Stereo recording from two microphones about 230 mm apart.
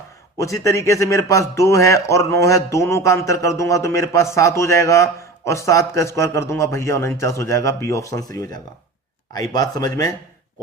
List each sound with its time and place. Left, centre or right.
0.3 s a man's voice: centre